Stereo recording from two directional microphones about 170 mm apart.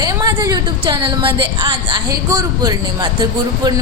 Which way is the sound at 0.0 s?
20° right (ahead or behind).